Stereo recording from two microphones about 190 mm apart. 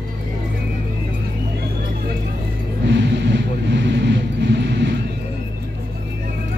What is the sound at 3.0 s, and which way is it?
Vehicle, 65° right (ahead or behind).